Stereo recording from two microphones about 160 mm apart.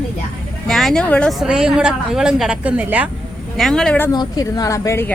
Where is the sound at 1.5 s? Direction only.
5° right (ahead or behind).